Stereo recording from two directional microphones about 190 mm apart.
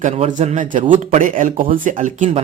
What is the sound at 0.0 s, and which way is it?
A man's voice, 35° right (ahead or behind).